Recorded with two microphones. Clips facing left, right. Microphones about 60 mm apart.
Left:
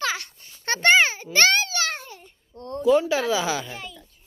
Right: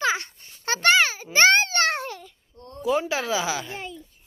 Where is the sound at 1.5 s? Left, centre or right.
Right.